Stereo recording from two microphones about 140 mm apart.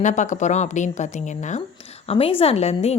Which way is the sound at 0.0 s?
60° left (ahead or behind).